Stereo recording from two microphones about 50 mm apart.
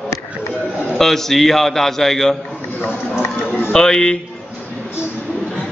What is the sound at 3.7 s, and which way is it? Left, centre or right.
Speech, centre.